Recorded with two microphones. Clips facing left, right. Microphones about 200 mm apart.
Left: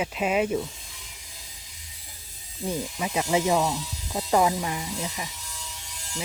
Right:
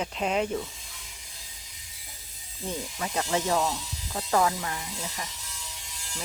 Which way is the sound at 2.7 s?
10° left (ahead or behind).